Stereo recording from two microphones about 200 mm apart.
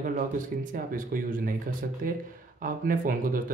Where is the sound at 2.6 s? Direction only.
45° right (ahead or behind).